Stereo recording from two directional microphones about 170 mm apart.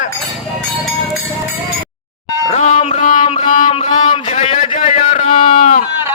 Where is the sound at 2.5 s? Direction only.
40° left (ahead or behind).